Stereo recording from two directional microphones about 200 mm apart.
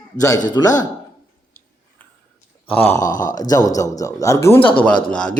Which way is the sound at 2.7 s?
10° left (ahead or behind).